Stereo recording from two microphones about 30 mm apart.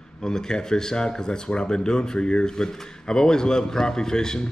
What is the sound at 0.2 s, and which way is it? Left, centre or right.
Speech, centre.